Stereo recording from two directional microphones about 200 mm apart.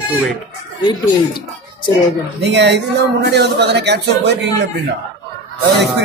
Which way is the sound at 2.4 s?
60° right (ahead or behind).